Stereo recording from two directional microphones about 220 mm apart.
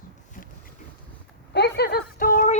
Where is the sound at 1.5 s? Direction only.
50° left (ahead or behind).